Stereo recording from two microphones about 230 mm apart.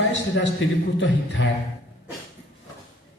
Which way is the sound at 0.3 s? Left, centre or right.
Left.